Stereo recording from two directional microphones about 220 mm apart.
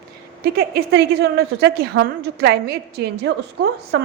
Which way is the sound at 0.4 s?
45° right (ahead or behind).